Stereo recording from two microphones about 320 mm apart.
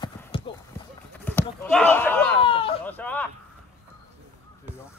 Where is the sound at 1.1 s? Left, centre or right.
Centre.